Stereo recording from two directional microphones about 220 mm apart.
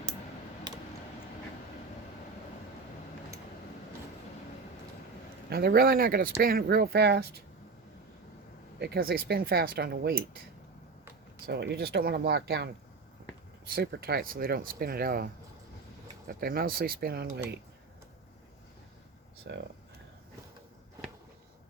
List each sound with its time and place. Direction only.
5.5 s speech: 45° right (ahead or behind)
8.8 s speech: 45° right (ahead or behind)
11.4 s speech: 50° right (ahead or behind)
16.4 s speech: 40° right (ahead or behind)
19.5 s speech: 50° right (ahead or behind)